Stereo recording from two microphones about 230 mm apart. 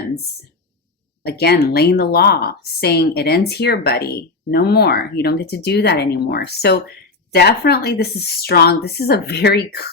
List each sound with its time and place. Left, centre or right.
1.2 s speech: left